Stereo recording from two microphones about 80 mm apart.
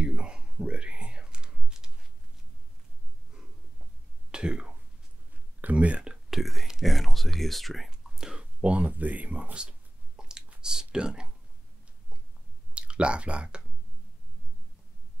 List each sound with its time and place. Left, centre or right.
0.0 s whispering: centre
4.3 s throat clearing: centre
5.6 s speech: centre
6.3 s speech: centre
12.7 s speech: centre